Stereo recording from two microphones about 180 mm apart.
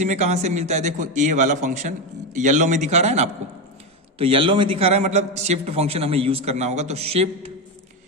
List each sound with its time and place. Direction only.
0.0 s a man's voice: 40° right (ahead or behind)